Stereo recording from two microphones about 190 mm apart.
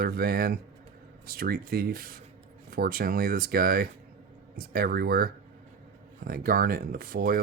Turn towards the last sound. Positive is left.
turn(degrees=-50)  # may be behind; listen again after turning